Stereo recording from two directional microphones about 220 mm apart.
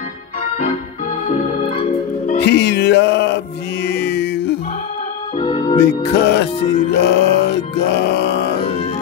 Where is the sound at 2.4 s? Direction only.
50° left (ahead or behind).